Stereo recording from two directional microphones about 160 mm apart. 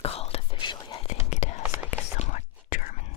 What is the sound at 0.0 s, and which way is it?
Whispering, 40° left (ahead or behind).